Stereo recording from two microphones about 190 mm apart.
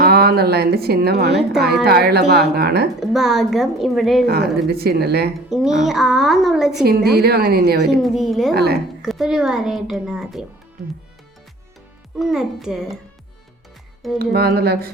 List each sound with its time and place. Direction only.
0.0 s a woman's voice: 55° right (ahead or behind)
3.0 s speech: centre (ahead or behind)
4.3 s a woman's voice: 55° right (ahead or behind)
5.5 s speech: 5° right (ahead or behind)
6.8 s a woman's voice: 55° right (ahead or behind)
7.9 s speech: centre (ahead or behind)
8.5 s a woman's voice: 55° right (ahead or behind)
9.0 s speech: centre (ahead or behind)
10.8 s music: centre (ahead or behind)
12.2 s speech: centre (ahead or behind)
14.2 s music: 55° right (ahead or behind)